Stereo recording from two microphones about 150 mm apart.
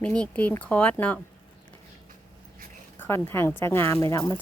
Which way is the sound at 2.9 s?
15° left (ahead or behind).